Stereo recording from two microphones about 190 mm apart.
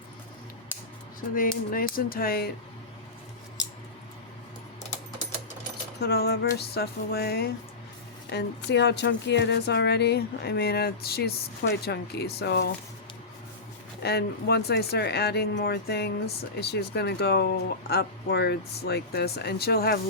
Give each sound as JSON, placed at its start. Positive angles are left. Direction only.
{"t": 0.7, "sound": "a sound", "side_deg": 10}
{"t": 1.4, "sound": "speech", "side_deg": 50}
{"t": 6.0, "sound": "speech", "side_deg": 55}
{"t": 14.0, "sound": "speech", "side_deg": 60}